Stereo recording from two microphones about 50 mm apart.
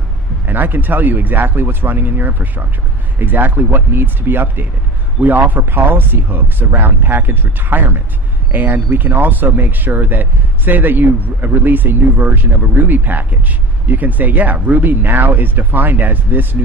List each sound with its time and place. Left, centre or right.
0.5 s speech: right